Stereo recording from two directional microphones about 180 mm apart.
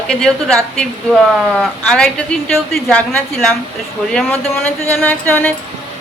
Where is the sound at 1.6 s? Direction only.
5° left (ahead or behind).